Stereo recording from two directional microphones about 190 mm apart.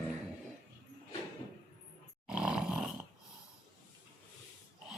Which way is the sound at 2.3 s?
5° right (ahead or behind).